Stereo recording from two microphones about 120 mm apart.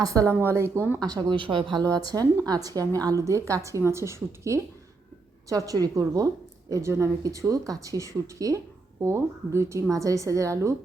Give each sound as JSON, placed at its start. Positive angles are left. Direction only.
{"t": 0.0, "sound": "speech", "side_deg": -30}
{"t": 1.0, "sound": "speech", "side_deg": -35}
{"t": 2.0, "sound": "speech", "side_deg": -30}